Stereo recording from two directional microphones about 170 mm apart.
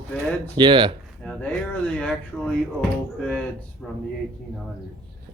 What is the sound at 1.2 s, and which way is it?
Speech, 5° left (ahead or behind).